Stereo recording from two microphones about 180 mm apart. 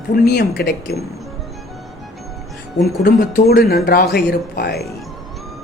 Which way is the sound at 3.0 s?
60° left (ahead or behind).